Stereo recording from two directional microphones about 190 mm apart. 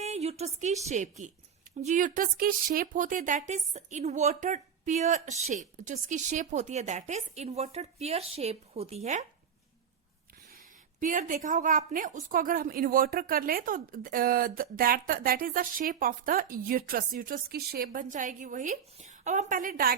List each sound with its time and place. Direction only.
0.0 s a woman's voice: 35° right (ahead or behind)
11.0 s a woman's voice: 45° right (ahead or behind)